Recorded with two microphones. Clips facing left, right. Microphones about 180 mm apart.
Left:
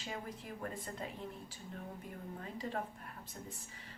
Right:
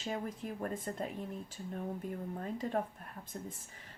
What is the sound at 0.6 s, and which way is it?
Speech, 45° right (ahead or behind).